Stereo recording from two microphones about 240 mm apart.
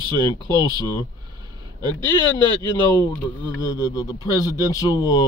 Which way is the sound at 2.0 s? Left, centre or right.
Centre.